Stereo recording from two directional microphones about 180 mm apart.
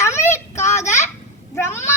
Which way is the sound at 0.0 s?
15° left (ahead or behind).